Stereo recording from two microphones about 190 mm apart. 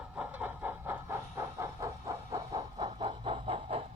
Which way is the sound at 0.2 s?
10° right (ahead or behind).